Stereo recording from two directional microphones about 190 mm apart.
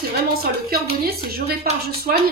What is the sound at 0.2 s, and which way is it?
A woman's voice, 55° right (ahead or behind).